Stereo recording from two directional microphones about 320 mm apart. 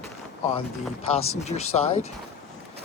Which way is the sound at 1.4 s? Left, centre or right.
Centre.